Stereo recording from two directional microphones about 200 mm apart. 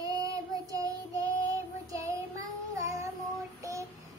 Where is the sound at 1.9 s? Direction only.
15° right (ahead or behind).